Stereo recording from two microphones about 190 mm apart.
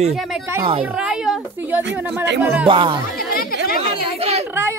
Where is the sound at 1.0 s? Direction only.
5° right (ahead or behind).